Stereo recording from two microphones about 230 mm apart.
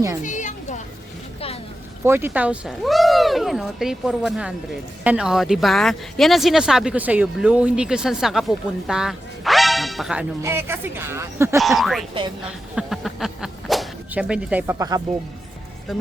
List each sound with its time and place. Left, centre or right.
0.2 s a sound: left
2.0 s speech: centre
11.6 s speech: centre